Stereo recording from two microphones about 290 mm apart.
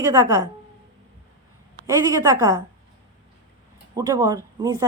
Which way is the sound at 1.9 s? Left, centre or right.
Centre.